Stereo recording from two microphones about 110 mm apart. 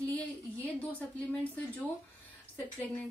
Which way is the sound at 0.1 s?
15° left (ahead or behind).